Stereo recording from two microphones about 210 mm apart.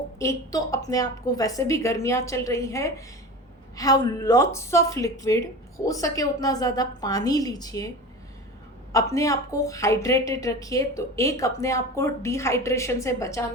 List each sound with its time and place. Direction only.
0.2 s a woman's voice: 15° left (ahead or behind)